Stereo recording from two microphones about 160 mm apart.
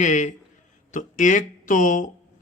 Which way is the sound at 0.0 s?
50° left (ahead or behind).